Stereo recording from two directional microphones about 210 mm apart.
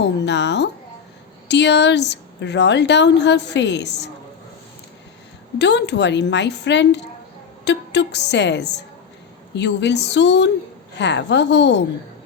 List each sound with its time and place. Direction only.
0.0 s a woman's voice: 55° left (ahead or behind)
5.5 s a woman's voice: 55° left (ahead or behind)